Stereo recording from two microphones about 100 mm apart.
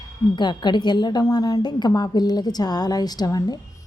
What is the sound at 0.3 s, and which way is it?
A woman's voice, 50° left (ahead or behind).